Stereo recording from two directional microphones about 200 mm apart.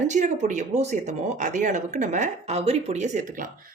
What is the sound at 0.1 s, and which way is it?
Speech, 40° right (ahead or behind).